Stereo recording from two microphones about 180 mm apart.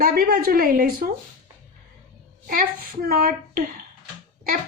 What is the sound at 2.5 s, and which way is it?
A woman's voice, 55° right (ahead or behind).